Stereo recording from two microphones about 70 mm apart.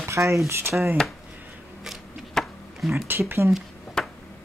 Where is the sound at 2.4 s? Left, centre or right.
Centre.